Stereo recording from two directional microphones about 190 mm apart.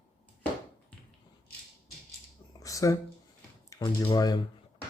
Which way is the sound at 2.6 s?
15° left (ahead or behind).